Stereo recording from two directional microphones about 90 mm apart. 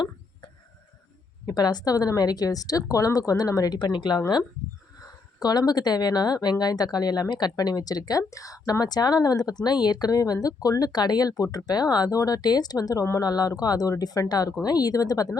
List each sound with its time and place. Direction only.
1.5 s speech: 45° left (ahead or behind)
5.4 s speech: 45° left (ahead or behind)